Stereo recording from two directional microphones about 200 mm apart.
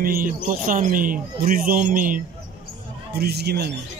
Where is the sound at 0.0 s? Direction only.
45° right (ahead or behind).